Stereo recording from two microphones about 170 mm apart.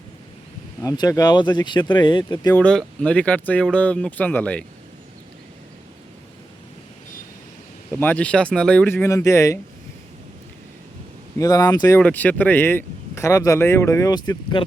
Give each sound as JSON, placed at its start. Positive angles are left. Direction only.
{"t": 0.8, "sound": "speech", "side_deg": 20}
{"t": 2.5, "sound": "speech", "side_deg": 5}
{"t": 7.9, "sound": "speech", "side_deg": 10}
{"t": 11.3, "sound": "speech", "side_deg": 20}
{"t": 11.9, "sound": "speech", "side_deg": 10}